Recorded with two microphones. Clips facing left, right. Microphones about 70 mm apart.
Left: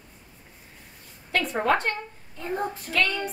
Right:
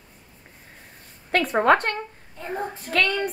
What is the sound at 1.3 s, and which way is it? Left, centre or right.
Speech, right.